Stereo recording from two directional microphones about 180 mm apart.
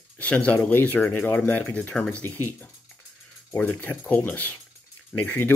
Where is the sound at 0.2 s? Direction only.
5° left (ahead or behind).